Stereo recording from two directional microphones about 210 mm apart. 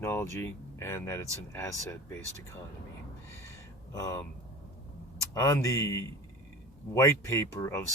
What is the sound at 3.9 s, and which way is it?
Speech, 15° left (ahead or behind).